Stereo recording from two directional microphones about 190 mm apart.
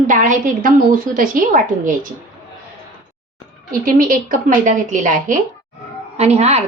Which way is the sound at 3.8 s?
45° right (ahead or behind).